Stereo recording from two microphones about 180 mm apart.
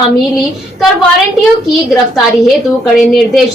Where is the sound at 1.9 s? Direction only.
Centre (ahead or behind).